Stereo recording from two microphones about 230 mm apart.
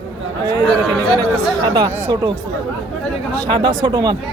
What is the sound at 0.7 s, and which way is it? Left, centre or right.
Speech, left.